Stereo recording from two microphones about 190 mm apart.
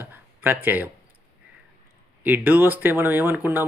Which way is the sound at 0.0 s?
10° right (ahead or behind).